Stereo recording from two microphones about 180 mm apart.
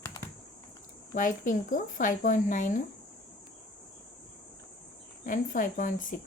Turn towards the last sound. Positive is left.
turn(degrees=45)  # may be behind; listen again after turning